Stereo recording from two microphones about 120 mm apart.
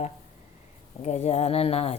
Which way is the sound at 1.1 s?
70° left (ahead or behind).